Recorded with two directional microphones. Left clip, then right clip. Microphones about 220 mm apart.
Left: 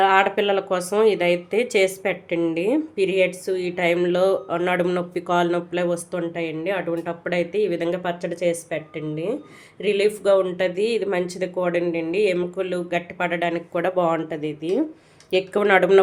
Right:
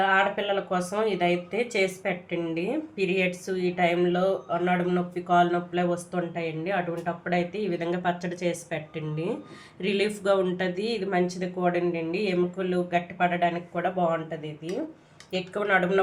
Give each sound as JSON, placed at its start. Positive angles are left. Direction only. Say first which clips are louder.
{"t": 0.0, "sound": "speech", "louder": "left 6 dB", "side_deg": 45}